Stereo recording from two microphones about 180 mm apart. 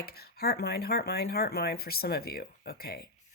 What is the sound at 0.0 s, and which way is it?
Speech, 60° left (ahead or behind).